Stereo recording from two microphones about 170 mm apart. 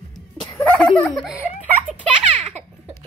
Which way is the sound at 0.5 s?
5° left (ahead or behind).